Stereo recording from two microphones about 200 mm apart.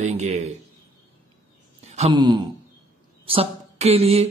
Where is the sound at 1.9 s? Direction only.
25° right (ahead or behind).